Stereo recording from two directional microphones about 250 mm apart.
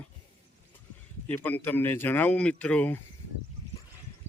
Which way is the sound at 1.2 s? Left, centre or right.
Centre.